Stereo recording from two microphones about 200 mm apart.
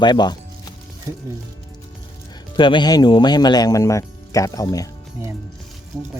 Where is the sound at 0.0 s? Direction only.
20° left (ahead or behind).